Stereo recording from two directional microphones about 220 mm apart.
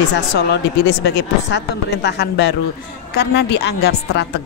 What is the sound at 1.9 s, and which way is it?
A woman's voice, 50° left (ahead or behind).